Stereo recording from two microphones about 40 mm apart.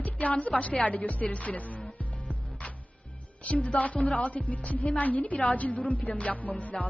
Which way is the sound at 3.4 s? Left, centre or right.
Left.